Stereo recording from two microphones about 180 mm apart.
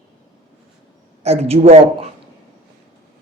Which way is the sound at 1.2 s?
35° right (ahead or behind).